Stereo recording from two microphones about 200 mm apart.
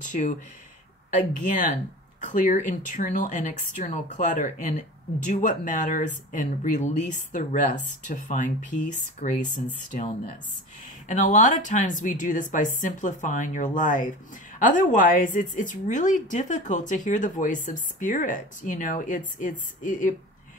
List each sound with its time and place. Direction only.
0.0 s speech: 40° left (ahead or behind)